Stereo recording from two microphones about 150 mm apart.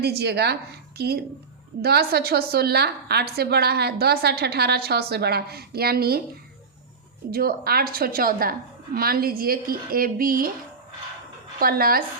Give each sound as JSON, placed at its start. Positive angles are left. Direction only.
{"t": 0.0, "sound": "a woman's voice", "side_deg": -90}
{"t": 7.3, "sound": "a woman's voice", "side_deg": -85}
{"t": 11.6, "sound": "speech", "side_deg": -80}